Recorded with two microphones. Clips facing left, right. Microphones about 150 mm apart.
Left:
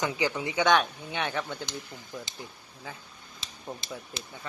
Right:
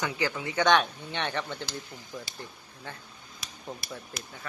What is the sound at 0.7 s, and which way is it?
Speech, 5° left (ahead or behind).